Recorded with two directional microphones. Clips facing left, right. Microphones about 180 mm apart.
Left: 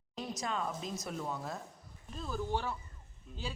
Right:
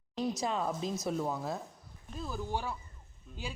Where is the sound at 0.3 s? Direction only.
5° right (ahead or behind).